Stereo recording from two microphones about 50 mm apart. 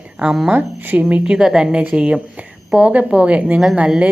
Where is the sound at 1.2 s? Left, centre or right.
Centre.